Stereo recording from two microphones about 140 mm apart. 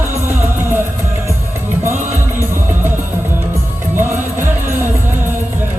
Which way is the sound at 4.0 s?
15° right (ahead or behind).